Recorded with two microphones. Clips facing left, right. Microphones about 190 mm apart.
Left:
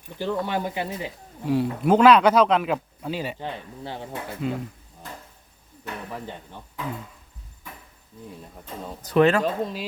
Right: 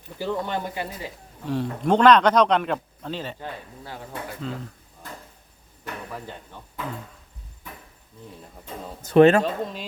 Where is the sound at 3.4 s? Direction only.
25° left (ahead or behind).